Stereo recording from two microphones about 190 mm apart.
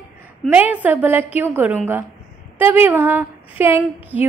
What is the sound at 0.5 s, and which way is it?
A woman's voice, 5° right (ahead or behind).